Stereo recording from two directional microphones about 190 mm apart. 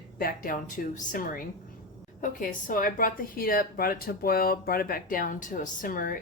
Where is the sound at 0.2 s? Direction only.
50° left (ahead or behind).